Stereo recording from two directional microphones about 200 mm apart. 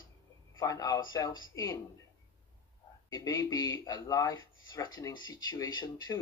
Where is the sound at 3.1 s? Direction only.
15° left (ahead or behind).